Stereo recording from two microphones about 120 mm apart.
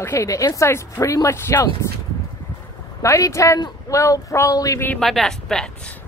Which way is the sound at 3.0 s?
25° left (ahead or behind).